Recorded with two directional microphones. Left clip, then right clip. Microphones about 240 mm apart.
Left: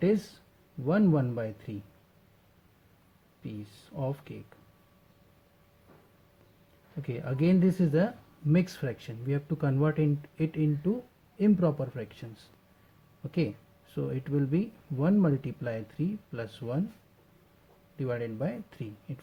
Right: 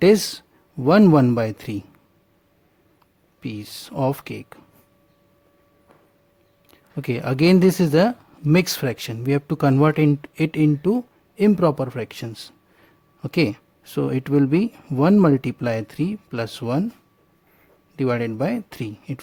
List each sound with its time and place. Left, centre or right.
0.9 s speech: right
3.4 s speech: right
7.0 s speech: right
17.9 s speech: right